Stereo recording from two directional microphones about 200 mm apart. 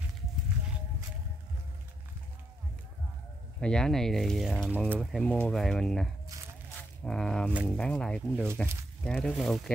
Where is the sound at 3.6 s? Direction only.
5° left (ahead or behind).